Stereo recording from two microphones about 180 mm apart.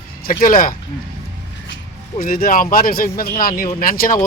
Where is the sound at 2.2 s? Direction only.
50° left (ahead or behind).